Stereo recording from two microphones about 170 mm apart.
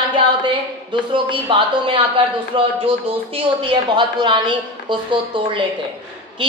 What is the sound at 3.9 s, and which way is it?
A woman's voice, 30° right (ahead or behind).